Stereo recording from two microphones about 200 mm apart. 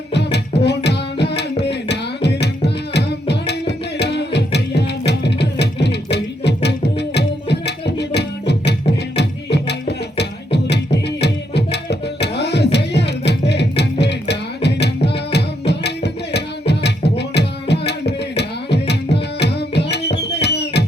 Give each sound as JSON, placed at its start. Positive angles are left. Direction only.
{"t": 0.1, "sound": "music", "side_deg": 55}
{"t": 0.9, "sound": "carnatic music", "side_deg": 55}
{"t": 4.0, "sound": "music", "side_deg": 60}